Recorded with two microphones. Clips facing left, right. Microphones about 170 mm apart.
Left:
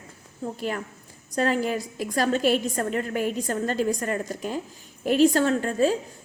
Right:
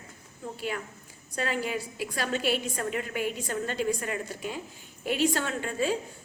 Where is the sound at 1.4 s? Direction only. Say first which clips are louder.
Left 7 dB; 40° left (ahead or behind).